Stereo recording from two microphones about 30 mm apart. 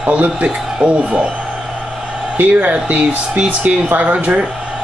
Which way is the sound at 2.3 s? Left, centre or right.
Right.